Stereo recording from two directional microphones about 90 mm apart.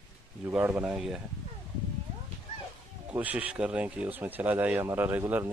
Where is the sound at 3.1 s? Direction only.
15° right (ahead or behind).